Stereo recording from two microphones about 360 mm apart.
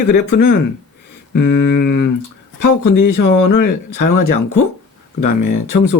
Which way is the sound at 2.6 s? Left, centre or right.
Left.